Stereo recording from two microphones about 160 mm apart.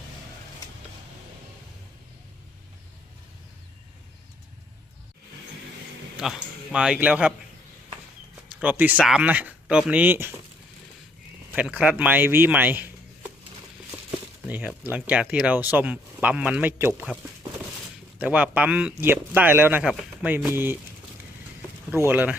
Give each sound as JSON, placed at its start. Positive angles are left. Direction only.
{"t": 6.1, "sound": "speech", "side_deg": -5}
{"t": 8.6, "sound": "speech", "side_deg": -10}
{"t": 11.5, "sound": "speech", "side_deg": -5}
{"t": 14.4, "sound": "speech", "side_deg": -10}
{"t": 18.2, "sound": "speech", "side_deg": -10}
{"t": 21.9, "sound": "speech", "side_deg": -15}